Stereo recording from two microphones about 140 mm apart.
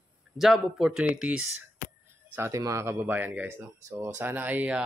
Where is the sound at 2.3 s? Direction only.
20° right (ahead or behind).